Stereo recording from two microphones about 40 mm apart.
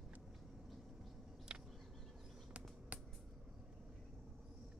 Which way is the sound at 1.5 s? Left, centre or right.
Centre.